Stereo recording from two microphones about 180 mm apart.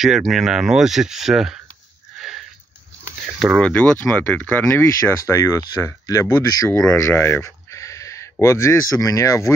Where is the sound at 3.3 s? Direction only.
Centre (ahead or behind).